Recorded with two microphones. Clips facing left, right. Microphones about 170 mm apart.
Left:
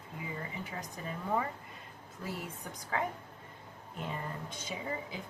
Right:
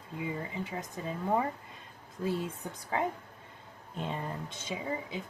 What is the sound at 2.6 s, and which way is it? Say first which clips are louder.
Speech: right 4 dB; 25° right (ahead or behind).